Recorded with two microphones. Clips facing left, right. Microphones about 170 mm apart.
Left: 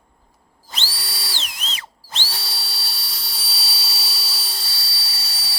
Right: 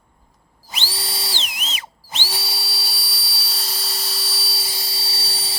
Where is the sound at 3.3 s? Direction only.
Centre (ahead or behind).